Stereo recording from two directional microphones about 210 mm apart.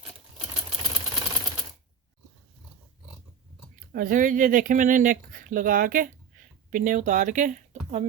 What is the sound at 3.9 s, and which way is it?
Speech, 40° right (ahead or behind).